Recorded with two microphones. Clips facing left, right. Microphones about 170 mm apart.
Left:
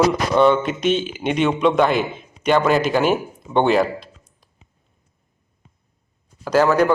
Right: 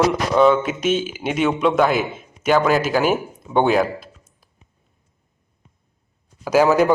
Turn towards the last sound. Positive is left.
turn(degrees=-15)  # may be behind; listen again after turning